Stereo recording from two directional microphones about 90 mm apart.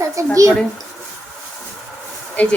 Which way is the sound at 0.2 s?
35° right (ahead or behind).